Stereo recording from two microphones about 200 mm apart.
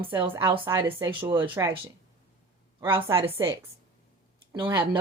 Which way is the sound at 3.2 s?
10° right (ahead or behind).